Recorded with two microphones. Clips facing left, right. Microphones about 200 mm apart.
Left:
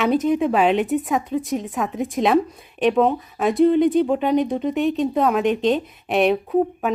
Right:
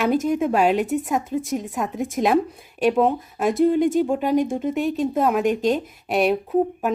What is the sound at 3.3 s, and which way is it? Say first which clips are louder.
Speech: left 1 dB; centre (ahead or behind).